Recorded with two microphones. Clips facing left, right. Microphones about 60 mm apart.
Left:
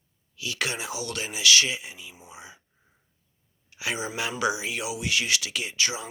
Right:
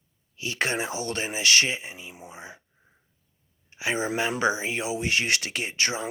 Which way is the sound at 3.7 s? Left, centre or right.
Right.